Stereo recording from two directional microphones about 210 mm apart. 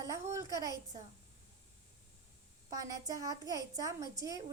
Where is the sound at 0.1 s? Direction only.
15° right (ahead or behind).